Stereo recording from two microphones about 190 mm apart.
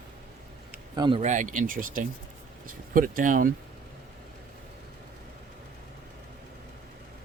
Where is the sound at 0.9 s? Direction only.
25° right (ahead or behind).